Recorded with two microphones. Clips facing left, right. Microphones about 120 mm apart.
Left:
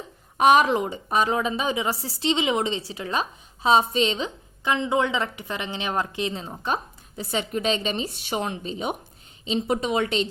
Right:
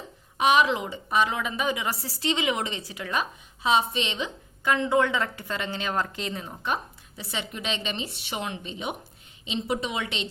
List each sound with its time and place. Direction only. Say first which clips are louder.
0.3 s a woman's voice: left 4 dB; 45° left (ahead or behind)
4.6 s a woman's voice: even; 20° left (ahead or behind)
7.2 s a woman's voice: left 8 dB; 45° left (ahead or behind)